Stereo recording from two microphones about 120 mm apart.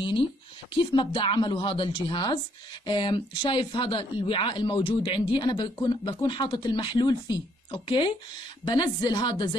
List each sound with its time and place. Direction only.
0.7 s speech: 45° left (ahead or behind)